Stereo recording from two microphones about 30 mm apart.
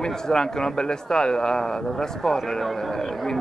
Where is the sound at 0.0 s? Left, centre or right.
Left.